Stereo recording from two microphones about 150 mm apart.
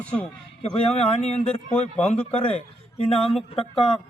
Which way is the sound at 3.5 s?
40° left (ahead or behind).